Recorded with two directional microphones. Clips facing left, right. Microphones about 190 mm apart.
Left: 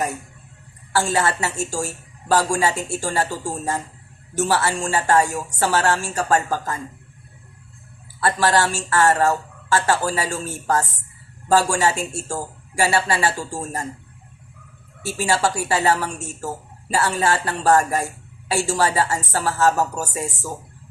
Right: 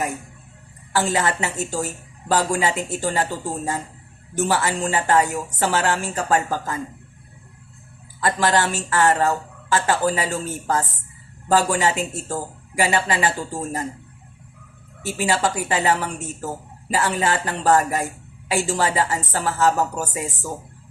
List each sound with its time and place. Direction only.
0.9 s speech: 20° right (ahead or behind)
8.2 s speech: 15° right (ahead or behind)
15.0 s speech: 15° right (ahead or behind)